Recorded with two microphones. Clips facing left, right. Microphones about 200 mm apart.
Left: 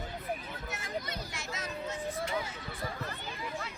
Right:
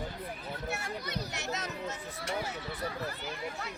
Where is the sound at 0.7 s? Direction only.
70° right (ahead or behind).